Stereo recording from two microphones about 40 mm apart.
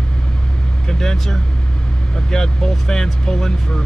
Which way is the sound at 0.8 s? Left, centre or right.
Centre.